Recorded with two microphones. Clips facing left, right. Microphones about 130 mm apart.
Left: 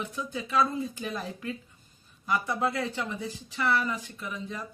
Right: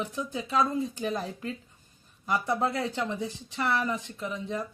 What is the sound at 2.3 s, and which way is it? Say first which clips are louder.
Speech: right 1 dB; 25° right (ahead or behind).